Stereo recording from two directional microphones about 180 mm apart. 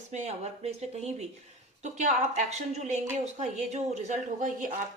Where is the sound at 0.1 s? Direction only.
40° right (ahead or behind).